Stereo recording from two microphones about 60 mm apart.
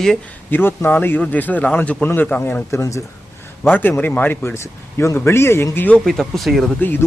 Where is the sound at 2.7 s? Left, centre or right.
Left.